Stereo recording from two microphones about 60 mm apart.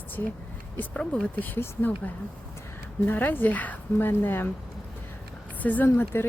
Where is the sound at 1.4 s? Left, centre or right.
Left.